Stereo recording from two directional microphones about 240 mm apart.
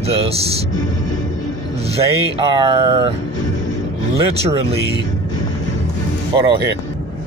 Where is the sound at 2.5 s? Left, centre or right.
Centre.